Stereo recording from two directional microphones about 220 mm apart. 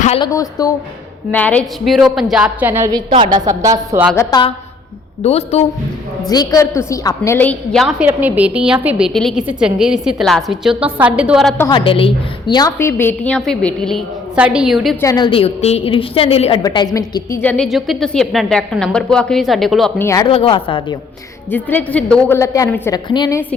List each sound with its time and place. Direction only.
0.0 s a woman's voice: 30° left (ahead or behind)
0.3 s a woman's voice: 15° left (ahead or behind); by 3.8 s 15° right (ahead or behind)
4.1 s a woman's voice: 15° left (ahead or behind)
6.2 s a woman's voice: 15° left (ahead or behind)
11.7 s a woman's voice: 25° left (ahead or behind); by 14.9 s centre (ahead or behind)
15.0 s a woman's voice: 20° left (ahead or behind); by 20.1 s centre (ahead or behind)
20.1 s a woman's voice: 20° left (ahead or behind)
21.5 s a woman's voice: 10° left (ahead or behind)